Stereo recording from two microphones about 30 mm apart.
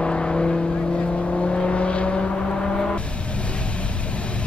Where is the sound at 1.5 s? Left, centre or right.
Left.